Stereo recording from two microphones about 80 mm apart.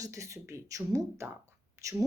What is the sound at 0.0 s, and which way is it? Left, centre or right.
A woman's voice, right.